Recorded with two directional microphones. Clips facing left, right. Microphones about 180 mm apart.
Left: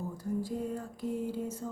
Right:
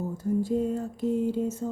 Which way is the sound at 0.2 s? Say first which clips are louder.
Right 9 dB; 25° right (ahead or behind).